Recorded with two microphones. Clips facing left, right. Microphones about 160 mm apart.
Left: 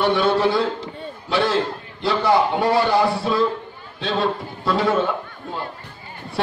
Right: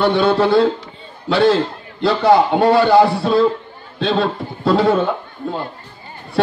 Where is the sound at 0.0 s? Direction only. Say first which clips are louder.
Right 3 dB; 60° right (ahead or behind).